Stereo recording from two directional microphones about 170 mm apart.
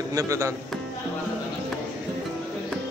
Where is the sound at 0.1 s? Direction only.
20° right (ahead or behind).